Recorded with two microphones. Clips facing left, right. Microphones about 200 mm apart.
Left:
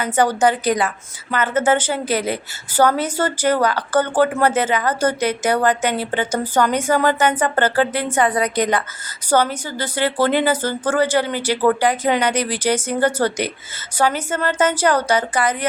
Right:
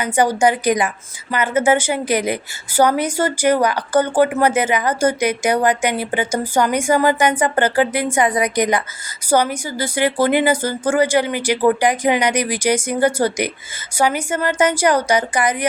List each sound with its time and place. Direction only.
0.0 s a woman's voice: 10° right (ahead or behind)